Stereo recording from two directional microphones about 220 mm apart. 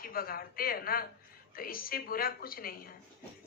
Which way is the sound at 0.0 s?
40° left (ahead or behind).